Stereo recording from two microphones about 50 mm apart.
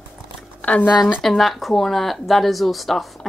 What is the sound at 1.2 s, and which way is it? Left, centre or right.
Speech, centre.